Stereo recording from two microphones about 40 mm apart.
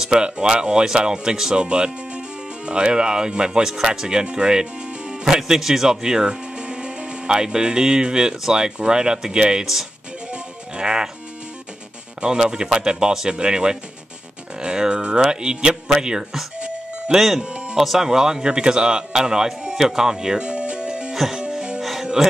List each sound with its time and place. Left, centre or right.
0.0 s speech: right
10.3 s music: right
12.2 s speech: centre
17.4 s music: right
17.7 s a man's voice: centre; by 21.1 s right
21.1 s music: centre